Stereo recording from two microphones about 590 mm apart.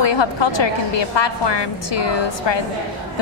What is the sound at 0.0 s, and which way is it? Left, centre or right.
A woman's voice, left.